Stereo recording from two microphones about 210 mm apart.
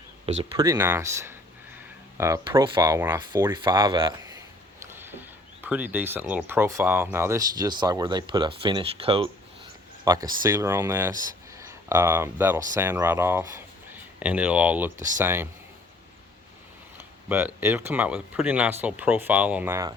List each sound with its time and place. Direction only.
0.5 s speech: 15° right (ahead or behind)
4.8 s a sound: 10° right (ahead or behind)
5.6 s speech: 10° right (ahead or behind)
17.2 s speech: 10° right (ahead or behind)